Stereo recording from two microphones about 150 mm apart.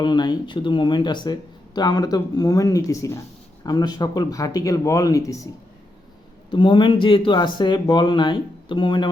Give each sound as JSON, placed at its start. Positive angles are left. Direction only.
{"t": 0.0, "sound": "speech", "side_deg": 30}
{"t": 6.5, "sound": "speech", "side_deg": 30}